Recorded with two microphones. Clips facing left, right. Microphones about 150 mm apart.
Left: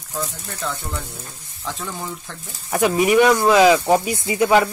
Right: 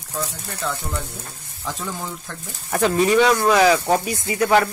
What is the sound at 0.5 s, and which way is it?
Speech, centre (ahead or behind).